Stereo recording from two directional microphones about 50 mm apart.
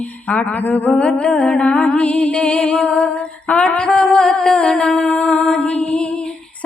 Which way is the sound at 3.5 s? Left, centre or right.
Left.